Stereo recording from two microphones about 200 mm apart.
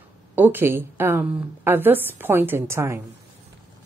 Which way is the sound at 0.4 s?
10° right (ahead or behind).